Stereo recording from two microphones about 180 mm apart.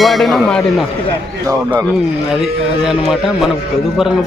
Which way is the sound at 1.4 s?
15° right (ahead or behind).